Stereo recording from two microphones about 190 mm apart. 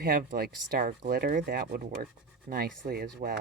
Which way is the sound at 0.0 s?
45° right (ahead or behind).